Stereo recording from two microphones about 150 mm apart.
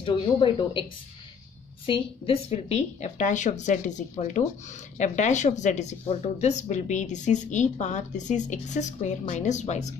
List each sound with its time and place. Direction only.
0.0 s a woman's voice: 35° left (ahead or behind)
1.9 s speech: 35° left (ahead or behind)